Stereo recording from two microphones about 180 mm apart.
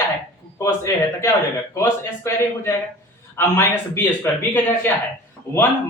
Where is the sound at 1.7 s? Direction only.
15° left (ahead or behind).